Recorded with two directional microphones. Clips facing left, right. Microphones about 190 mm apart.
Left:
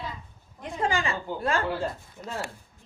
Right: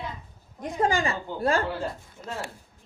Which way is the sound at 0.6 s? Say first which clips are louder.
Right 3 dB; 40° right (ahead or behind).